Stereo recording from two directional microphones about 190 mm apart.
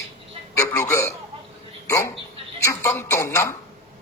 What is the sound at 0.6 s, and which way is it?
A man's voice, 15° left (ahead or behind).